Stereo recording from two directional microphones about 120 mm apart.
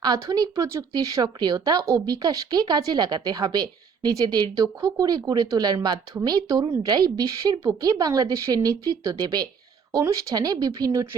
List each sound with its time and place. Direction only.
0.0 s speech: 30° right (ahead or behind)